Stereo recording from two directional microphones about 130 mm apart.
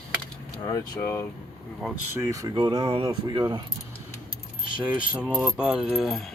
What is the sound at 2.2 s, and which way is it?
Speech, 25° right (ahead or behind).